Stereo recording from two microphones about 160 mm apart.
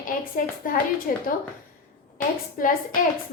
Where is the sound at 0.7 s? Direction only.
55° left (ahead or behind).